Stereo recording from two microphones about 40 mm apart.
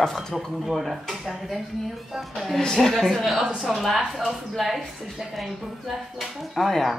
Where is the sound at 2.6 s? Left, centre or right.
Centre.